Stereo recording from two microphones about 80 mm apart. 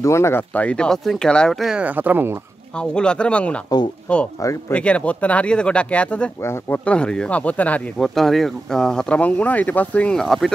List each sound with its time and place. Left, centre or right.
0.0 s speech: left
0.6 s speech: centre
1.8 s speech: right
2.8 s speech: centre
4.4 s speech: left
4.7 s speech: centre
6.4 s speech: left
6.8 s speech: centre
8.0 s speech: centre
9.2 s speech: centre
10.1 s speech: centre